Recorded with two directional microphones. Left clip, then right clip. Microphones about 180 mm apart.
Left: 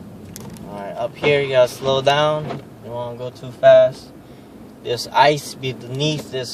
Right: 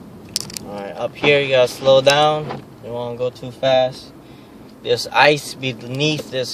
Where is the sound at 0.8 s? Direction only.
30° right (ahead or behind).